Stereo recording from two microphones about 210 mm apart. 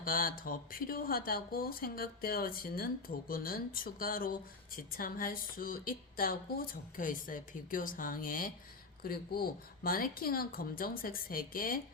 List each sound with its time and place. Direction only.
0.0 s speech: 40° left (ahead or behind)